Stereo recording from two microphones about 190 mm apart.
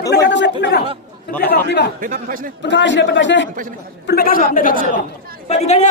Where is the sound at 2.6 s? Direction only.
70° left (ahead or behind).